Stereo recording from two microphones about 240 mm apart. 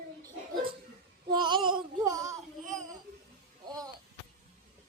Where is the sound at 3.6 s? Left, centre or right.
Centre.